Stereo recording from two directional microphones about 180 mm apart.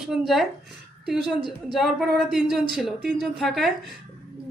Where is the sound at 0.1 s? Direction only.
Centre (ahead or behind).